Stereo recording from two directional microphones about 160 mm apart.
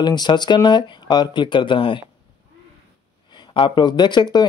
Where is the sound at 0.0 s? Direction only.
25° left (ahead or behind).